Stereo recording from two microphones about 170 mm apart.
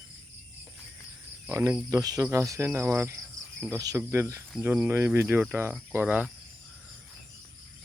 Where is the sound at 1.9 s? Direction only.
20° right (ahead or behind).